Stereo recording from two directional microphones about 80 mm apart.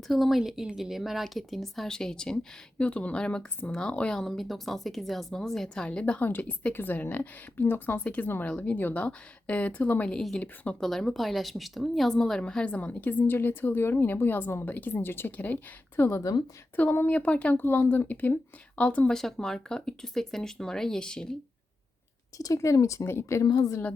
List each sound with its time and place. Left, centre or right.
0.1 s a woman's voice: centre
10.2 s speech: centre
10.4 s a woman's voice: centre
10.8 s a woman's voice: centre
17.6 s a woman's voice: left; by 21.3 s centre
22.4 s speech: left